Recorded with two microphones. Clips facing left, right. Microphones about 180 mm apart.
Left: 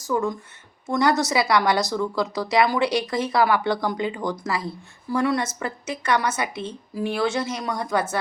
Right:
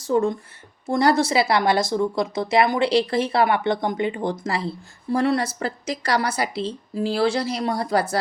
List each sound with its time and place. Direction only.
0.1 s speech: 30° right (ahead or behind)